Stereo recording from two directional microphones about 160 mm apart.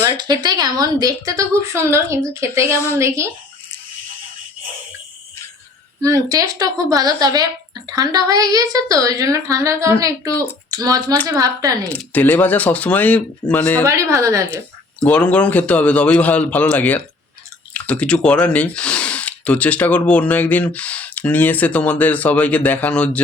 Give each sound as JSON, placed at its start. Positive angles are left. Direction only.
{"t": 0.2, "sound": "a woman's voice", "side_deg": -25}
{"t": 6.0, "sound": "a woman's voice", "side_deg": -20}
{"t": 11.9, "sound": "speech", "side_deg": 10}
{"t": 14.1, "sound": "a woman's voice", "side_deg": -20}
{"t": 15.0, "sound": "speech", "side_deg": 5}